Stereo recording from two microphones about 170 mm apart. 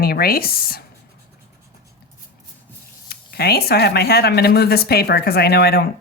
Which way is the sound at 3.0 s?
65° left (ahead or behind).